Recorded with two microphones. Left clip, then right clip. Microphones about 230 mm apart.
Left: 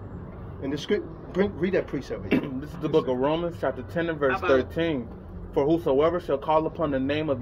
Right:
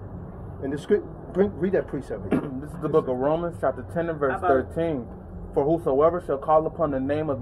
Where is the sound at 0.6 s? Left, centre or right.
Left.